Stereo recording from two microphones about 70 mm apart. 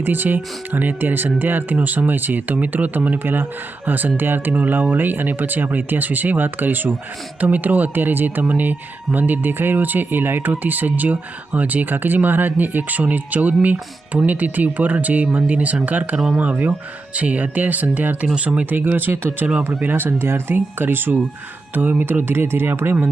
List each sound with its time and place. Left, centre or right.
0.0 s speech: right